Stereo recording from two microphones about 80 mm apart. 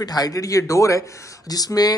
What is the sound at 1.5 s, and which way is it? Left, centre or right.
Speech, left.